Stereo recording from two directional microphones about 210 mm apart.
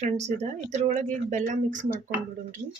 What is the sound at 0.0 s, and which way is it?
Speech, 30° right (ahead or behind).